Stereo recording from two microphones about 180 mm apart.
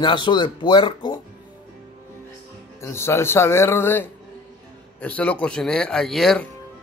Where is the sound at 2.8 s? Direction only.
15° left (ahead or behind).